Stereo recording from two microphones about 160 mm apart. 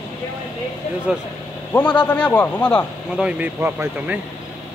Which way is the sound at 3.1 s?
10° right (ahead or behind).